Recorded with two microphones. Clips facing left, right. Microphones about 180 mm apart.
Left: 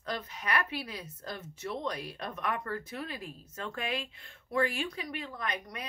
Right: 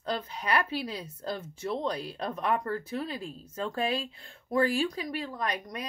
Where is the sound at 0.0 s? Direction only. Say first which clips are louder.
Right 4 dB; 30° right (ahead or behind).